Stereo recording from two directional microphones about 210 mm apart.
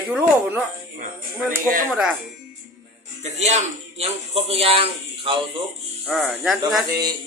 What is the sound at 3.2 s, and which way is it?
Speech, 30° right (ahead or behind).